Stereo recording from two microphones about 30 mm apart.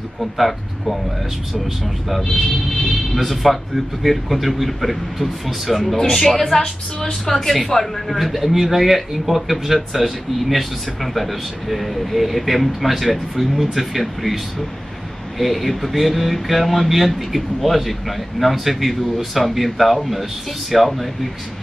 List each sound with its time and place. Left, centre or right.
0.2 s speech: centre
2.0 s speech: centre
6.1 s a woman's voice: centre
7.3 s a woman's voice: centre